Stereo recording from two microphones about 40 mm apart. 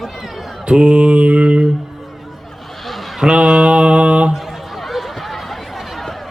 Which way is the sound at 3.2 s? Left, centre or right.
Right.